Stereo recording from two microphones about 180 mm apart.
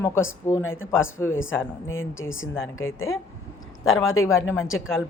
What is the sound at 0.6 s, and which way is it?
Speech, 90° left.